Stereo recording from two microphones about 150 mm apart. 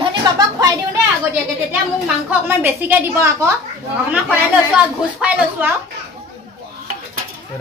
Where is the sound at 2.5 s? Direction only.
15° right (ahead or behind).